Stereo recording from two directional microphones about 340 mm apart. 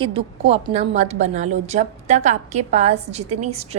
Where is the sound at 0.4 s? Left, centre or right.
Centre.